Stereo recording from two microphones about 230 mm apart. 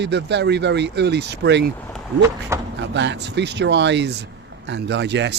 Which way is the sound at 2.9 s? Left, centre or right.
Right.